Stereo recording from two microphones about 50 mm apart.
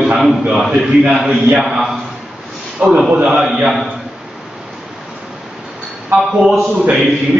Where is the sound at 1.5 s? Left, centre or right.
Centre.